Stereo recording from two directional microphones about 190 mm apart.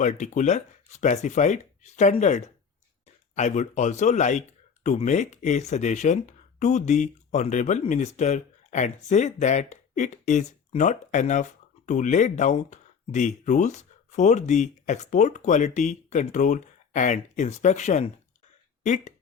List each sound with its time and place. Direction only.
0.0 s speech: 40° left (ahead or behind)